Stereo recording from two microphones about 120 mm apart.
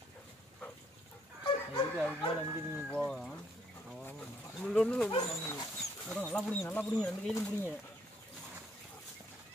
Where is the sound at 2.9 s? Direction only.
5° left (ahead or behind).